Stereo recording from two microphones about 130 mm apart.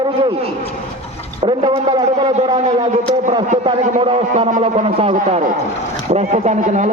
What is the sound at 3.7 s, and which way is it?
Speech, 35° right (ahead or behind).